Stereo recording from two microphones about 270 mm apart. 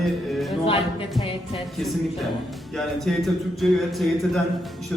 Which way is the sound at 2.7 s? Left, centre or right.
Centre.